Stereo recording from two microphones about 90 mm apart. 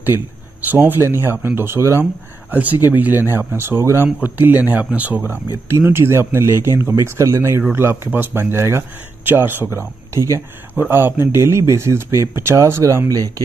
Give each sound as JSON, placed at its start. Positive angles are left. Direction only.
{"t": 0.0, "sound": "speech", "side_deg": -20}
{"t": 2.5, "sound": "speech", "side_deg": -15}